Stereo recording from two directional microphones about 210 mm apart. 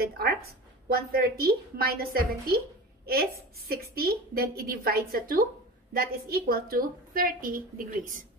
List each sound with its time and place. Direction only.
0.0 s a woman's voice: 45° right (ahead or behind)